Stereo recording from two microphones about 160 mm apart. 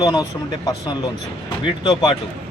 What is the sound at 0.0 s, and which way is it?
Speech, 25° left (ahead or behind).